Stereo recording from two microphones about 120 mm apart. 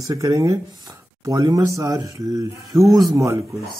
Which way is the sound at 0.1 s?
30° right (ahead or behind).